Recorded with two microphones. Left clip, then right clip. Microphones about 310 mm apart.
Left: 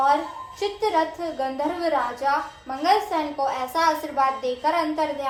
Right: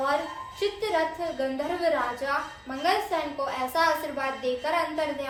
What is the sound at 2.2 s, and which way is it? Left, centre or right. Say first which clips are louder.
A woman's voice: left 5 dB; left.